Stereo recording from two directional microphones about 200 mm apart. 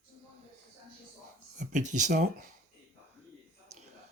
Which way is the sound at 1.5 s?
40° right (ahead or behind).